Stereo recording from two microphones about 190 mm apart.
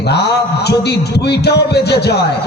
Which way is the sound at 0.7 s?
60° left (ahead or behind).